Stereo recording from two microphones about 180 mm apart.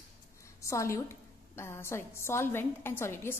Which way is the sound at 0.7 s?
15° left (ahead or behind).